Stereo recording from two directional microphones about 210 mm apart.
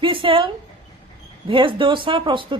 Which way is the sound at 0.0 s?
25° right (ahead or behind).